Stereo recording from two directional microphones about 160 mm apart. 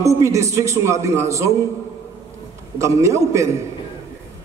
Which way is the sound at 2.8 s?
20° right (ahead or behind).